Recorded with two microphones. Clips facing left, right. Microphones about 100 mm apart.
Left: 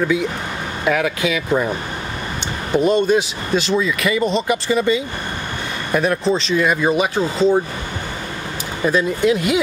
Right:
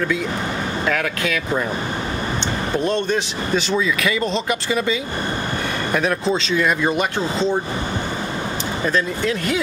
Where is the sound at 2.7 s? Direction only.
10° left (ahead or behind).